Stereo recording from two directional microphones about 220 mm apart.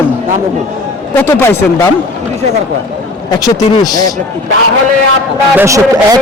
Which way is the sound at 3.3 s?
15° left (ahead or behind).